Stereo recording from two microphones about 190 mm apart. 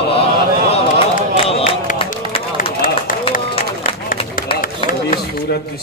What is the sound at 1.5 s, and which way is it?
Speech, 30° left (ahead or behind).